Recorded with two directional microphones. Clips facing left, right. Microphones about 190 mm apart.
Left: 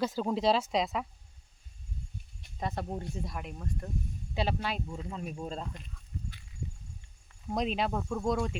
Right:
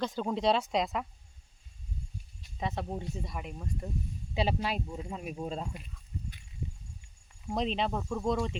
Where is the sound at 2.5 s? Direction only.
Centre (ahead or behind).